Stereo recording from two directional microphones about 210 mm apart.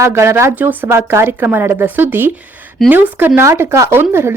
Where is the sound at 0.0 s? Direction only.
15° right (ahead or behind).